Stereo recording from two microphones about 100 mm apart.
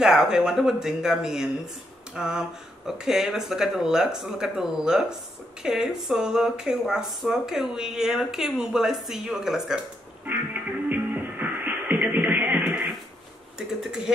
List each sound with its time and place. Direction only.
0.0 s speech: 5° right (ahead or behind)
10.2 s music: 15° right (ahead or behind)
13.6 s speech: 5° right (ahead or behind)